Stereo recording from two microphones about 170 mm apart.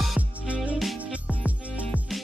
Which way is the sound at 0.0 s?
5° right (ahead or behind).